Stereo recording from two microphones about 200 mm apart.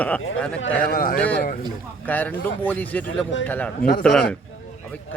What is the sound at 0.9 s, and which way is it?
Speech, 45° left (ahead or behind).